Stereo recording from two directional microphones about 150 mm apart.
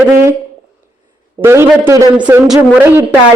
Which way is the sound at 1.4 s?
15° right (ahead or behind).